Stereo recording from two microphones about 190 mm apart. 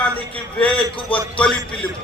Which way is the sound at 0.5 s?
5° left (ahead or behind).